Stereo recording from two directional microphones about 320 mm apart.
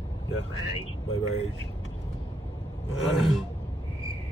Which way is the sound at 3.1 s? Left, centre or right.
Centre.